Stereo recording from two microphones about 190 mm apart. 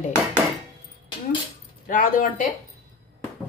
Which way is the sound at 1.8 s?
45° left (ahead or behind).